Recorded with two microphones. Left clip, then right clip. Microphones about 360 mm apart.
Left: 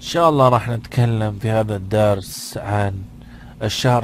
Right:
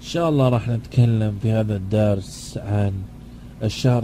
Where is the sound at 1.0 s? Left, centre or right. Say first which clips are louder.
Left 3 dB; centre.